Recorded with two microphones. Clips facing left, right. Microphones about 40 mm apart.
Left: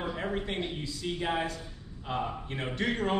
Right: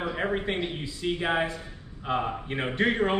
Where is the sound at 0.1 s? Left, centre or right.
Right.